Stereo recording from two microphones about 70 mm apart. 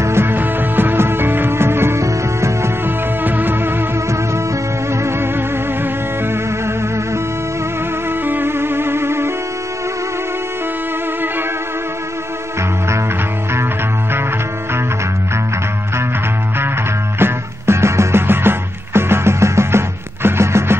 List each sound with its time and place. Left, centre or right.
0.0 s music: right
2.8 s music: right
5.0 s music: right
8.3 s music: right
17.2 s music: right